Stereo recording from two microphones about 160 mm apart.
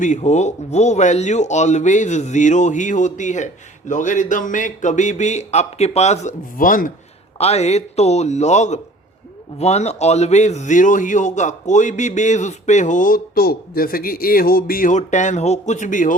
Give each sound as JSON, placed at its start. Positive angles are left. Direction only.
{"t": 0.0, "sound": "speech", "side_deg": 50}
{"t": 7.3, "sound": "speech", "side_deg": 40}